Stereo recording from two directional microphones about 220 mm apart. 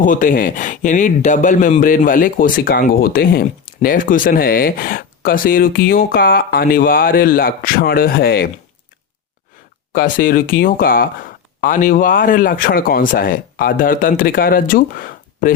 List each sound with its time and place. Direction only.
0.0 s speech: 35° left (ahead or behind)
9.9 s speech: 40° left (ahead or behind)